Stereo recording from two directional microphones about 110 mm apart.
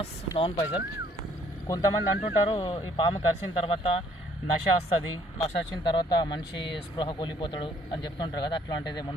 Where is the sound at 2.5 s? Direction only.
50° left (ahead or behind).